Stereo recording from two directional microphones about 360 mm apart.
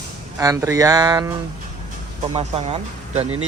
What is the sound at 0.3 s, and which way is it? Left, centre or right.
Speech, centre.